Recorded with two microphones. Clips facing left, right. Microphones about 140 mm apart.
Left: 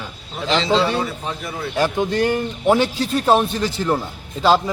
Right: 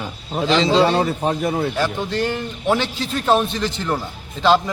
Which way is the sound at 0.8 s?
50° right (ahead or behind).